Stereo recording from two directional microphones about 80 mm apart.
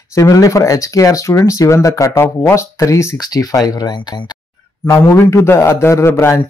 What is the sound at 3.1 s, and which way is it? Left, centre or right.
Speech, left.